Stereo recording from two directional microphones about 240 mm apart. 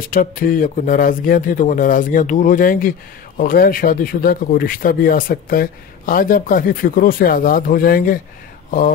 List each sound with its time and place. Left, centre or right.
0.1 s speech: left